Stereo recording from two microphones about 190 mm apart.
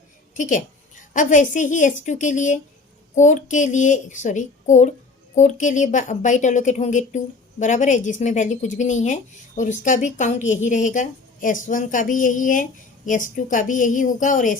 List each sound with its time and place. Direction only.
0.3 s a woman's voice: 40° left (ahead or behind)